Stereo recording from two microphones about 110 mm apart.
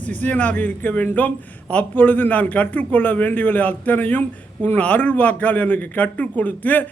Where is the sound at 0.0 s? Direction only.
15° left (ahead or behind).